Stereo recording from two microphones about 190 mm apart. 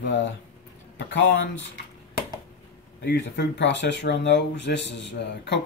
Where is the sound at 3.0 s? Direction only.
70° left (ahead or behind).